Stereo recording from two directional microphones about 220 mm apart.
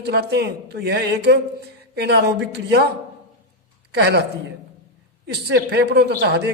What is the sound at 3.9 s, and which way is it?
Speech, 50° right (ahead or behind).